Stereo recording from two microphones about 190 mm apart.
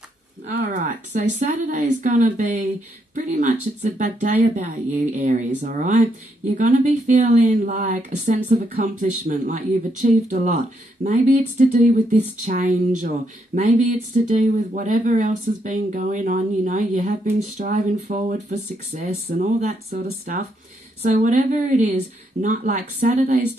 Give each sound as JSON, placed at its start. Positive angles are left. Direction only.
{"t": 0.6, "sound": "speech", "side_deg": -40}
{"t": 21.0, "sound": "speech", "side_deg": -40}